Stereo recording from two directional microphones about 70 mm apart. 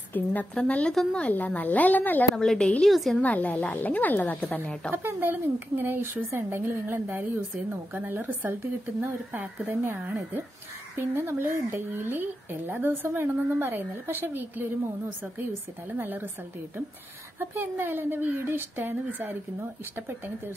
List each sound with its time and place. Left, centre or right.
0.1 s a woman's voice: left
2.3 s a woman's voice: centre
3.2 s speech: left
4.9 s speech: right
17.4 s speech: right